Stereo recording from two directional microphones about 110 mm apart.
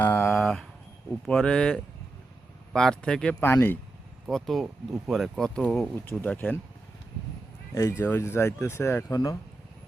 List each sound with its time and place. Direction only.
0.0 s a sound: 20° left (ahead or behind)
0.3 s a sound: centre (ahead or behind)
1.3 s a man's voice: 5° left (ahead or behind)
3.4 s speech: 20° left (ahead or behind)
4.3 s speech: centre (ahead or behind)
6.1 s a man's voice: 15° left (ahead or behind)
7.7 s speech: 25° left (ahead or behind)